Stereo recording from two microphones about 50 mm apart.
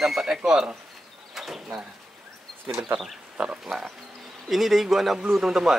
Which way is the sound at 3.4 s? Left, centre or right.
Centre.